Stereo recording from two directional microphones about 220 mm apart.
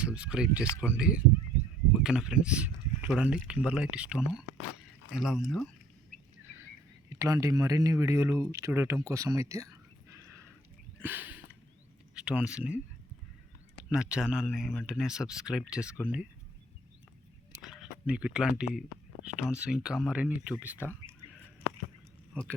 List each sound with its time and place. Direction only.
0.0 s speech: 5° right (ahead or behind)
7.2 s speech: 15° right (ahead or behind)
11.0 s a sound: 10° right (ahead or behind)
12.1 s speech: 5° right (ahead or behind)
13.9 s speech: 5° right (ahead or behind)
17.6 s speech: centre (ahead or behind)